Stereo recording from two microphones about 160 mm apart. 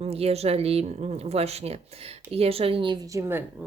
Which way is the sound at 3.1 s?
20° right (ahead or behind).